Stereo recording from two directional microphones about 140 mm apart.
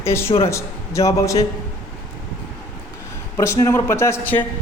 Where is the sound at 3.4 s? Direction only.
20° left (ahead or behind).